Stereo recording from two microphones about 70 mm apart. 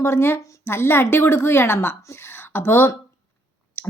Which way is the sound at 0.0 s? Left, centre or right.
Left.